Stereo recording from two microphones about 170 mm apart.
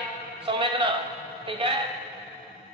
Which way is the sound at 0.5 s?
30° right (ahead or behind).